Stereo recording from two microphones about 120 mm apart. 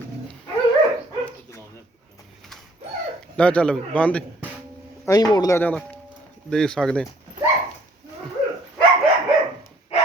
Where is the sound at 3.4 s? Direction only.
10° left (ahead or behind).